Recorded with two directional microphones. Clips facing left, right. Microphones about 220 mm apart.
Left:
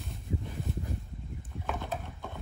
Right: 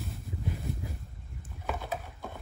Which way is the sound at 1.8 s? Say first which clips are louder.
Even; 5° right (ahead or behind).